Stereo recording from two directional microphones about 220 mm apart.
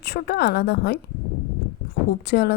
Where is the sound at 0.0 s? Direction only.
45° left (ahead or behind).